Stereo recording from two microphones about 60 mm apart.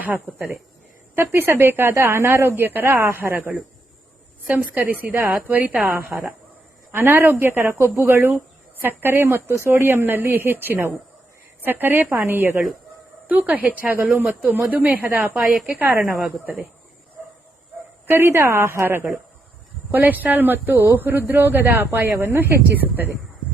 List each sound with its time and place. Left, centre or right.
0.0 s a woman's voice: right
1.1 s a woman's voice: right
4.5 s a woman's voice: right
6.9 s a man's voice: right
13.2 s a woman's voice: right
15.4 s a woman's voice: centre
15.8 s a man's voice: right
18.0 s a woman's voice: right
19.9 s a man's voice: right